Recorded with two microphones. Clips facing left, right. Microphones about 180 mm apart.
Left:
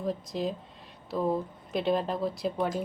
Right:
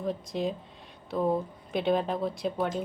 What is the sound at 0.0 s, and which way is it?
A woman's voice, centre (ahead or behind).